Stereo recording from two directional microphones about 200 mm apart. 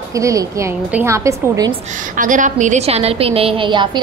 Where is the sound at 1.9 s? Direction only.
40° right (ahead or behind); by 4.0 s 25° right (ahead or behind).